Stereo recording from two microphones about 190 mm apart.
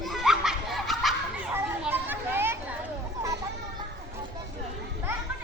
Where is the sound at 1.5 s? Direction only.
10° right (ahead or behind).